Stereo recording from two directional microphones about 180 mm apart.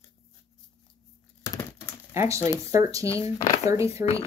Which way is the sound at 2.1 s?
15° right (ahead or behind).